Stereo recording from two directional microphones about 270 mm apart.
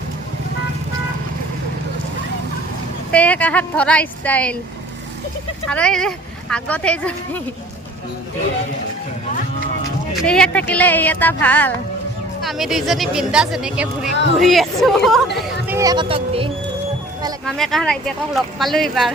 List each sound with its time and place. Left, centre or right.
3.1 s speech: centre
5.6 s speech: centre
10.2 s speech: centre
17.4 s speech: centre